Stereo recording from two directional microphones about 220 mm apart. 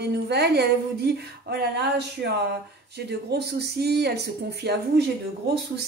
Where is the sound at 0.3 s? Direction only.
50° right (ahead or behind).